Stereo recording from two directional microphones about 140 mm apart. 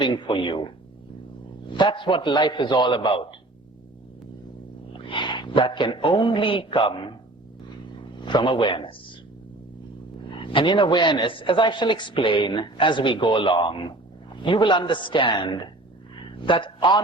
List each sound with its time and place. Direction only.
0.0 s speech: 35° left (ahead or behind)
1.7 s speech: 35° left (ahead or behind)
4.9 s a man's voice: 35° left (ahead or behind)
8.2 s speech: 35° left (ahead or behind)
10.4 s speech: 35° left (ahead or behind)